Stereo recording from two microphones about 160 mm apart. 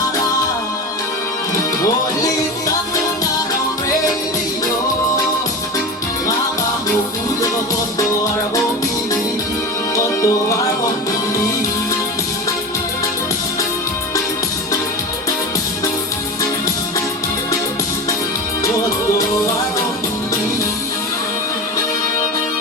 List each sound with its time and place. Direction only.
9.9 s music: 20° left (ahead or behind)